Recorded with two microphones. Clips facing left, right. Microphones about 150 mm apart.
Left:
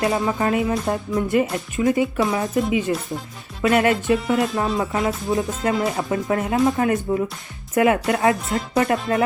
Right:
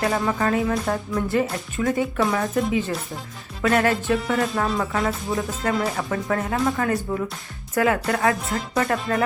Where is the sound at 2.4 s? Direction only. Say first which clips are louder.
Left 2 dB; centre (ahead or behind).